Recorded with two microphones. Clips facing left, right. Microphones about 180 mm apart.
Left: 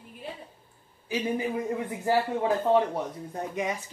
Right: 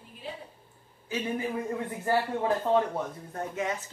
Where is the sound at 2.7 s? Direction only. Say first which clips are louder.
Left 2 dB; 15° left (ahead or behind).